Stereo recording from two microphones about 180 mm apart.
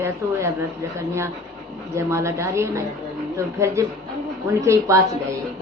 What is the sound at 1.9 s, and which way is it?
Speech, 15° right (ahead or behind).